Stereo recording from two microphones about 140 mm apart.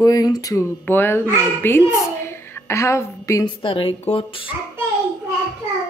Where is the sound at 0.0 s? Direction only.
25° left (ahead or behind).